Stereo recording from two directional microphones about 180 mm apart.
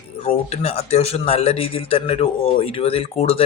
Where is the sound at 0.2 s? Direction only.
35° left (ahead or behind).